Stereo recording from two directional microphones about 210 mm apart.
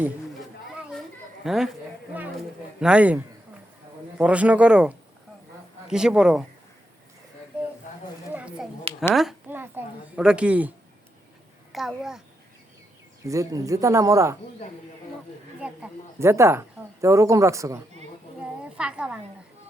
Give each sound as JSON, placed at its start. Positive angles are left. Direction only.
{"t": 1.5, "sound": "a woman's voice", "side_deg": 0}
{"t": 2.8, "sound": "a woman's voice", "side_deg": -5}
{"t": 4.2, "sound": "a woman's voice", "side_deg": -5}
{"t": 8.3, "sound": "a sound", "side_deg": -5}
{"t": 9.1, "sound": "a woman's voice", "side_deg": -5}
{"t": 11.7, "sound": "a woman's voice", "side_deg": 0}
{"t": 13.2, "sound": "speech", "side_deg": -15}
{"t": 15.6, "sound": "a woman's voice", "side_deg": -10}